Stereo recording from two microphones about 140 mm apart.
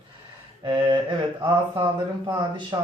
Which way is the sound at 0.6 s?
35° right (ahead or behind).